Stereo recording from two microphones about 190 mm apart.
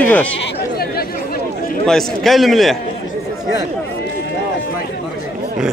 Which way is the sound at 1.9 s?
Centre (ahead or behind).